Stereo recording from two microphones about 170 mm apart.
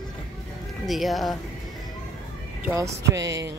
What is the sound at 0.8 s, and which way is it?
Speech, centre (ahead or behind).